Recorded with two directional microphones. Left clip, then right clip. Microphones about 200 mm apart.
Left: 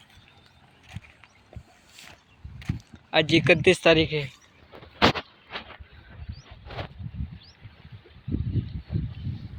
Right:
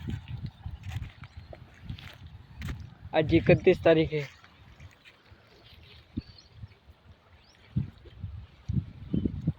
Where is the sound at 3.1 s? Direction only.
5° right (ahead or behind).